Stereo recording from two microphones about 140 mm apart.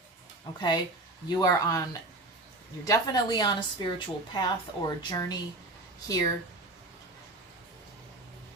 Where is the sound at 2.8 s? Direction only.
25° left (ahead or behind).